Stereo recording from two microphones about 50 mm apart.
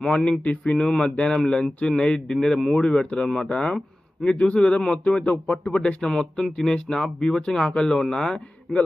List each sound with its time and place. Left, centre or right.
0.0 s speech: centre
0.3 s speech: left
4.2 s speech: left
6.0 s speech: centre